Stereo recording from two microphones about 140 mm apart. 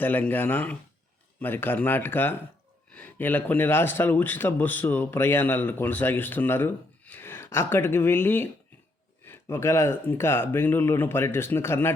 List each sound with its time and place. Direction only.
0.0 s a man's voice: 15° left (ahead or behind)